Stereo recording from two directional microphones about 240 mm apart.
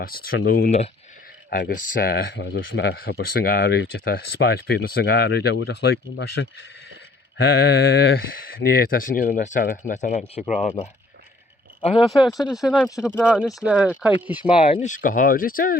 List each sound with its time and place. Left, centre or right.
0.0 s speech: left
7.9 s speech: left
11.9 s speech: centre
14.6 s speech: left